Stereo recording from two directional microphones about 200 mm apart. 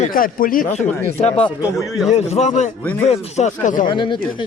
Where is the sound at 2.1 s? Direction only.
35° left (ahead or behind).